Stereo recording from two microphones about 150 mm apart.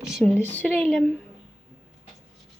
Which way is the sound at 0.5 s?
10° left (ahead or behind).